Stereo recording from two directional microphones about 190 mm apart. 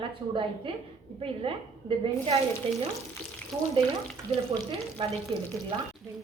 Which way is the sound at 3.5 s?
Centre (ahead or behind).